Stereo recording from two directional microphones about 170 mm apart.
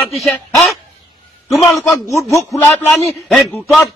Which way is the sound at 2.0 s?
20° left (ahead or behind).